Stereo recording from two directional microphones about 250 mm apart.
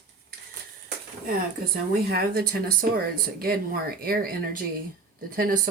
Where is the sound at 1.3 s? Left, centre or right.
Right.